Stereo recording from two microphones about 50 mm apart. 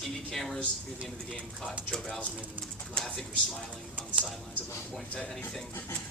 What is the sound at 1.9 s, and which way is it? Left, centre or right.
Speech, centre.